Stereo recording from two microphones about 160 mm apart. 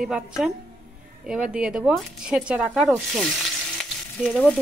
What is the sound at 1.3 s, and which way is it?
Speech, 5° right (ahead or behind).